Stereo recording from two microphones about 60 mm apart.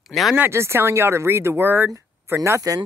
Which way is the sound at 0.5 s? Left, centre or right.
Right.